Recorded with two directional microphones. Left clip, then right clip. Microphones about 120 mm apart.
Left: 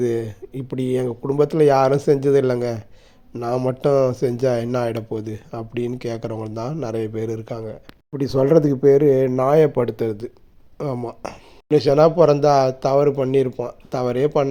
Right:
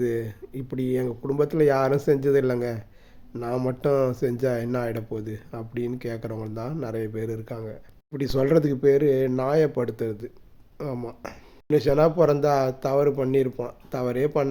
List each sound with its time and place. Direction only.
0.0 s speech: 15° left (ahead or behind); by 9.8 s 35° left (ahead or behind)
9.8 s speech: 20° left (ahead or behind)